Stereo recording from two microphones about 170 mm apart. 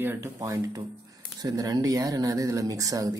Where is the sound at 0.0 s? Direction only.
15° right (ahead or behind).